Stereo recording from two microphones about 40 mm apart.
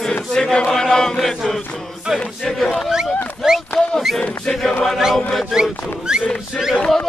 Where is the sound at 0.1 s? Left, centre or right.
Centre.